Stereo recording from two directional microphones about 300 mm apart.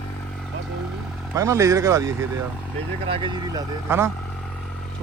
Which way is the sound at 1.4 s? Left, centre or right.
Centre.